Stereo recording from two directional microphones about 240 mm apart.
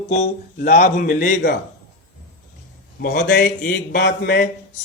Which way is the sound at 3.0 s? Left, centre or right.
Left.